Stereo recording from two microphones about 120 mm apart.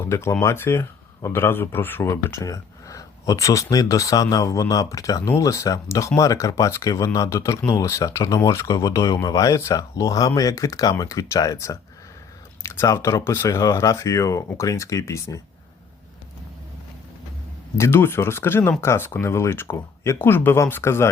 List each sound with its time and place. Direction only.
0.1 s speech: 25° left (ahead or behind)
17.7 s speech: 20° left (ahead or behind)